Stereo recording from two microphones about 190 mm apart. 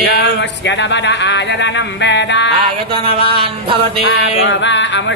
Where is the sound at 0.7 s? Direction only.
65° left (ahead or behind).